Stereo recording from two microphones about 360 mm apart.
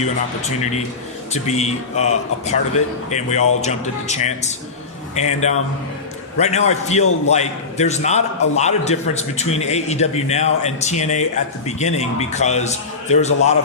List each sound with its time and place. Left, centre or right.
1.3 s a man's voice: centre